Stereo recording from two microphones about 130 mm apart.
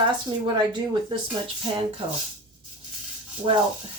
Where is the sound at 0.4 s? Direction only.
35° right (ahead or behind).